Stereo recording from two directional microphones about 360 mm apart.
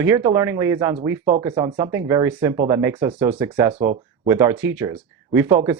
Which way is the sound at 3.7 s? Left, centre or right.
Centre.